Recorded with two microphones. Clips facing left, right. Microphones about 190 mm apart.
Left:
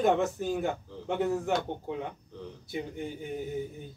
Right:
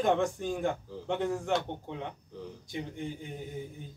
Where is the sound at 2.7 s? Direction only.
5° left (ahead or behind).